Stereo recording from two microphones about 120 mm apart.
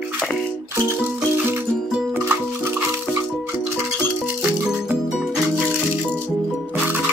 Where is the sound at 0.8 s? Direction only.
20° right (ahead or behind).